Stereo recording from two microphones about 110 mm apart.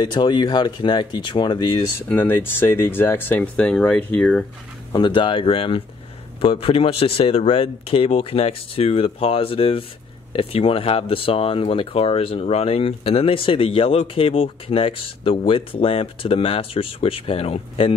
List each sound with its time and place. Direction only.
0.0 s speech: 40° left (ahead or behind)
2.0 s speech: 20° left (ahead or behind)
4.9 s speech: 45° left (ahead or behind)